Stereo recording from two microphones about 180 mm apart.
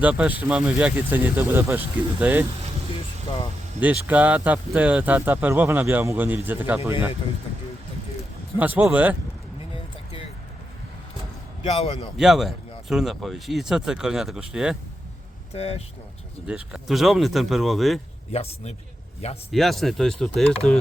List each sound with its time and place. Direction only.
0.0 s speech: 5° right (ahead or behind)
3.8 s speech: 10° right (ahead or behind)
8.5 s speech: 10° right (ahead or behind)
11.6 s a man's voice: 35° left (ahead or behind)
12.1 s speech: centre (ahead or behind)
15.5 s a man's voice: 35° left (ahead or behind)
16.5 s speech: 5° right (ahead or behind)
18.3 s a man's voice: 35° left (ahead or behind)
19.5 s speech: centre (ahead or behind)